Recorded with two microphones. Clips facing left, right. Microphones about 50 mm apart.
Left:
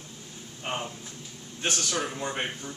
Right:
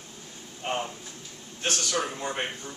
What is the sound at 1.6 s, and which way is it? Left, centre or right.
A man's voice, centre.